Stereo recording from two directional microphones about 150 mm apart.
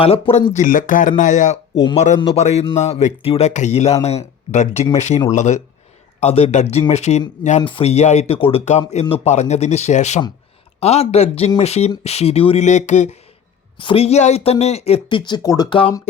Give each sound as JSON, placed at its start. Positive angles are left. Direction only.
{"t": 0.0, "sound": "speech", "side_deg": 40}
{"t": 0.6, "sound": "speech", "side_deg": 65}
{"t": 2.2, "sound": "speech", "side_deg": 45}
{"t": 7.6, "sound": "speech", "side_deg": 35}
{"t": 13.7, "sound": "speech", "side_deg": 35}